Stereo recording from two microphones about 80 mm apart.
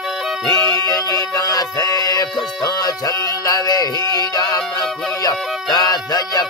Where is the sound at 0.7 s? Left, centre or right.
Left.